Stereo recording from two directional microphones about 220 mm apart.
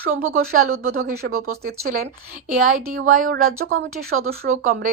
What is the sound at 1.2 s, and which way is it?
Speech, 50° right (ahead or behind).